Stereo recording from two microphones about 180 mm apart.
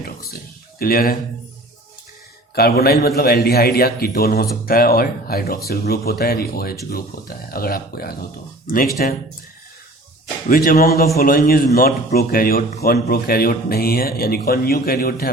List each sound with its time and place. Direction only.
0.8 s speech: 55° left (ahead or behind)
2.6 s speech: 60° left (ahead or behind)
10.5 s a man's voice: 55° left (ahead or behind)